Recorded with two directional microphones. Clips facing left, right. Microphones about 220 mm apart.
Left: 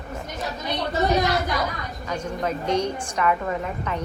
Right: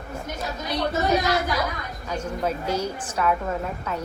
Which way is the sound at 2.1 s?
5° right (ahead or behind).